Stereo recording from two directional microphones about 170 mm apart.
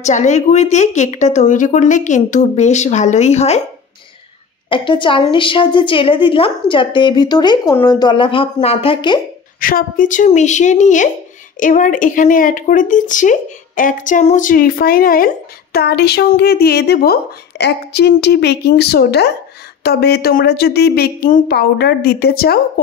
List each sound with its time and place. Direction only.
0.0 s a woman's voice: 45° left (ahead or behind)
4.6 s a woman's voice: 30° left (ahead or behind)
9.6 s a woman's voice: 55° left (ahead or behind)